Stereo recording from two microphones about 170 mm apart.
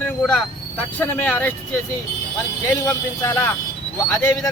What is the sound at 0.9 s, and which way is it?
Speech, 10° left (ahead or behind).